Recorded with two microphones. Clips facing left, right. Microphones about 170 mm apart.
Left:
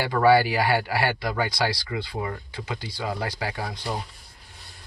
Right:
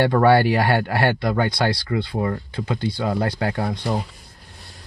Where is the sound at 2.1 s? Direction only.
45° right (ahead or behind).